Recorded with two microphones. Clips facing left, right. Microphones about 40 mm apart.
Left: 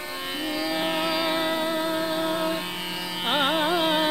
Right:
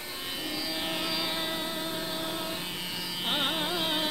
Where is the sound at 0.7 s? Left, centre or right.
Left.